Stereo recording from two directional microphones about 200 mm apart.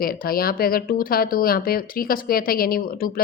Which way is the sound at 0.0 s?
45° left (ahead or behind).